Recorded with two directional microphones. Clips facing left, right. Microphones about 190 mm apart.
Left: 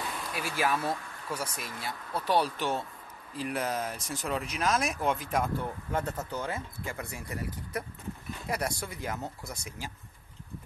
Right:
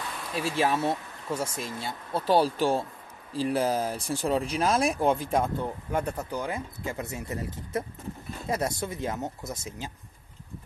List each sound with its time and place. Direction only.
0.3 s speech: 25° right (ahead or behind)